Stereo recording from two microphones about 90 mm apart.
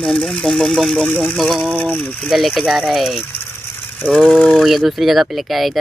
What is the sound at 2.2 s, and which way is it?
Speech, centre (ahead or behind).